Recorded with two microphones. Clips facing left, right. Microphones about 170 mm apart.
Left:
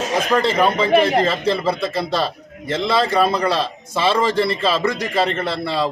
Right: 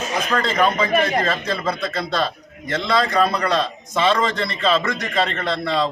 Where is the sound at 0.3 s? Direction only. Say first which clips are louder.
Left 5 dB; 15° left (ahead or behind).